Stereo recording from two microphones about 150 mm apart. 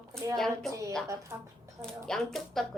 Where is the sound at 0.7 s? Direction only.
20° right (ahead or behind).